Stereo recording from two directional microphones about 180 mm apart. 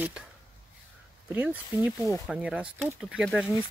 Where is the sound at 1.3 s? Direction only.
10° right (ahead or behind).